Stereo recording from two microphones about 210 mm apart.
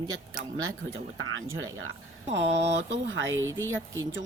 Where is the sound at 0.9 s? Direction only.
70° right (ahead or behind).